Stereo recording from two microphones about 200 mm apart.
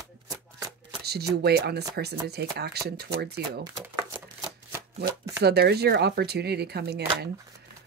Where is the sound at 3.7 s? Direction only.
15° right (ahead or behind).